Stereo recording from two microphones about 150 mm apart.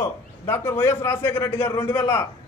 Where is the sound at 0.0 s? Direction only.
15° left (ahead or behind).